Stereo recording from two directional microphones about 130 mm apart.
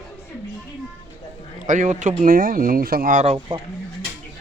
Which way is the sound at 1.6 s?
70° right (ahead or behind).